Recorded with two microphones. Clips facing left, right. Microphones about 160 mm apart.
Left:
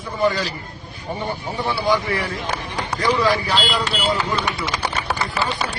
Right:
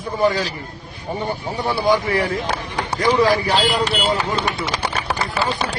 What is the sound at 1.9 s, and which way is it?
A man's voice, 45° right (ahead or behind).